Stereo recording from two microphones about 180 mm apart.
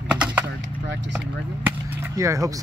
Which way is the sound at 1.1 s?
10° right (ahead or behind).